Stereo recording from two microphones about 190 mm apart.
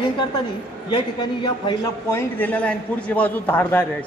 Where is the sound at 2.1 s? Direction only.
10° left (ahead or behind).